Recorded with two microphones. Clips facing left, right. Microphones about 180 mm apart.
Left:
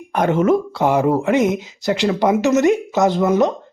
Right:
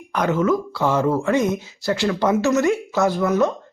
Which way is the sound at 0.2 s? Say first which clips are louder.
Left 4 dB; 25° left (ahead or behind).